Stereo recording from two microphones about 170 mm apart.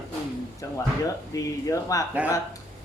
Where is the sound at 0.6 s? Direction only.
20° left (ahead or behind).